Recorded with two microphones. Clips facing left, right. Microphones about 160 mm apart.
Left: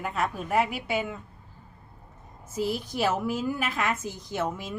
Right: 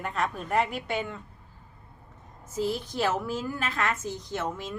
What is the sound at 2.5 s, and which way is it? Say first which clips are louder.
A woman's voice: even; 10° left (ahead or behind).